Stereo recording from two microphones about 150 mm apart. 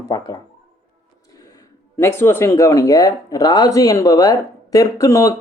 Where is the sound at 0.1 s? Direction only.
25° left (ahead or behind).